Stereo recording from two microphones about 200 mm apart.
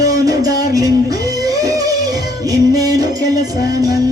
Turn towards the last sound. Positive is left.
turn(degrees=-20)  # may be behind; listen again after turning